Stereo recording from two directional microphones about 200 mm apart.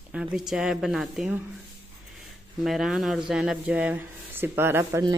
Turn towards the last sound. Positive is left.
turn(degrees=-15)  # may be behind; listen again after turning